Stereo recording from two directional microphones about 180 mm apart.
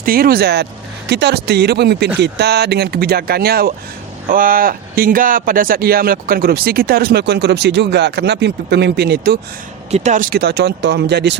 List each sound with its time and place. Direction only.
0.0 s a man's voice: 55° right (ahead or behind)
9.9 s a man's voice: 40° right (ahead or behind); by 11.3 s 70° right (ahead or behind)